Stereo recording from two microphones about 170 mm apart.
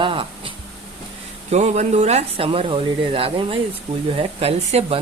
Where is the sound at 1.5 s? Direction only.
40° right (ahead or behind).